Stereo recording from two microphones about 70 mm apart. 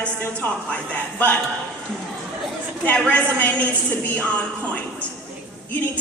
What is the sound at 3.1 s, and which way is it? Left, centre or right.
Speech, left.